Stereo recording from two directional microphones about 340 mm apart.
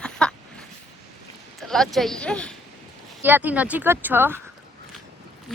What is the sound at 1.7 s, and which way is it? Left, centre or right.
Speech, centre.